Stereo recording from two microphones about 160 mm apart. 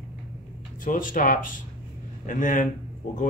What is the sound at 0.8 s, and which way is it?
A man's voice, 60° left (ahead or behind).